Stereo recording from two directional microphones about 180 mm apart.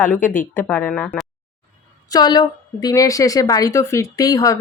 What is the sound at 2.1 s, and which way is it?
A woman's voice, 20° left (ahead or behind).